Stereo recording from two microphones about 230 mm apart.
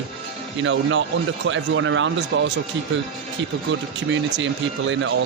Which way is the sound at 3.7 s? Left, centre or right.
Right.